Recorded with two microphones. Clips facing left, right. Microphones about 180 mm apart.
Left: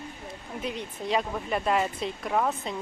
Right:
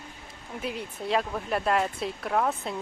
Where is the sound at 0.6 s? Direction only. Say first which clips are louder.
Even; 5° right (ahead or behind).